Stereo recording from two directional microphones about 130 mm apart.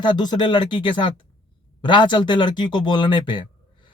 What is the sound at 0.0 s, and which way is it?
A man's voice, 35° left (ahead or behind).